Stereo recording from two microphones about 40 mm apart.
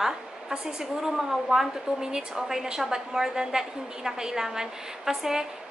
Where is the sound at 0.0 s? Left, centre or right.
Centre.